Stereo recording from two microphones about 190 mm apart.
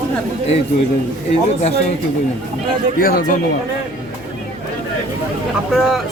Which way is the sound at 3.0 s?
50° left (ahead or behind).